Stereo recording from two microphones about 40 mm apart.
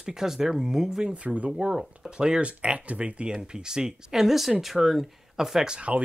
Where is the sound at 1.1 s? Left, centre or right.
Right; by 5.6 s centre.